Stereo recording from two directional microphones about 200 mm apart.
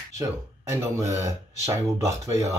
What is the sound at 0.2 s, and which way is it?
Speech, 15° right (ahead or behind).